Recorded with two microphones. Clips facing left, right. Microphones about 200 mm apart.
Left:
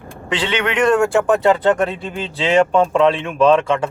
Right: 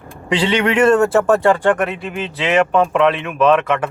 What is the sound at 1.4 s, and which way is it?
Speech, 20° left (ahead or behind).